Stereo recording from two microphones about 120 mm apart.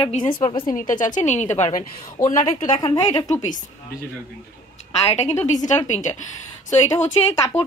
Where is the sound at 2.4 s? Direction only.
40° left (ahead or behind).